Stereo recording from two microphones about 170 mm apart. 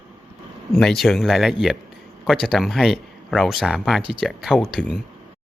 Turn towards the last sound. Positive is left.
turn(degrees=0)  # may be behind; listen again after turning